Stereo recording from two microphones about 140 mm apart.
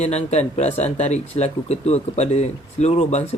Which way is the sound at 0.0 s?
50° left (ahead or behind).